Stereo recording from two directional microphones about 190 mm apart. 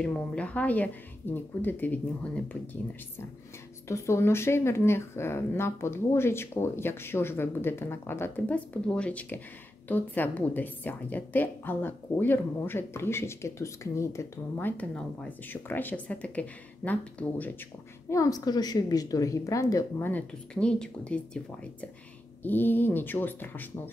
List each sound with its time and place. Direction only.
0.0 s a woman's voice: 5° left (ahead or behind)
3.9 s a woman's voice: 15° left (ahead or behind)
22.4 s a woman's voice: 10° left (ahead or behind)